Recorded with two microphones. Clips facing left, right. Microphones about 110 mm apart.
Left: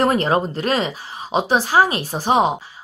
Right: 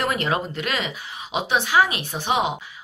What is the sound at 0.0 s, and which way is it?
Speech, 35° left (ahead or behind).